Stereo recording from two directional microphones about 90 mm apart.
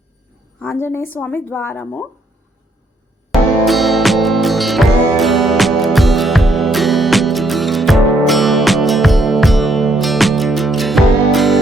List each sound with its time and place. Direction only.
0.8 s a woman's voice: 25° left (ahead or behind)
3.7 s music: centre (ahead or behind)